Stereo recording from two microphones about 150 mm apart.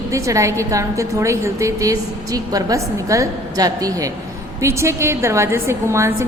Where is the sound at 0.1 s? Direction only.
20° right (ahead or behind).